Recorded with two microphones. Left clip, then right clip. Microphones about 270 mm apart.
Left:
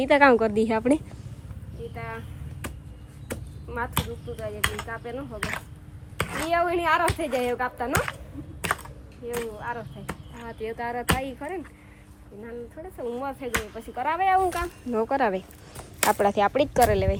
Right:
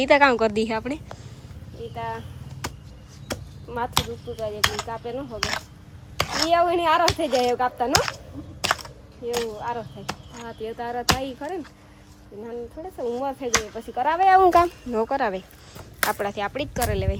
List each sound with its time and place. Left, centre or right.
0.0 s speech: centre
2.0 s speech: centre
3.2 s speech: centre
9.3 s speech: centre
13.0 s speech: centre
14.9 s speech: centre